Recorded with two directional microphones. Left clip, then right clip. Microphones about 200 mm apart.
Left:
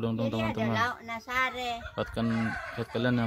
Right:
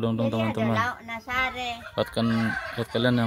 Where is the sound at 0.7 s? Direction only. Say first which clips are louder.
Right 3 dB; 40° left (ahead or behind).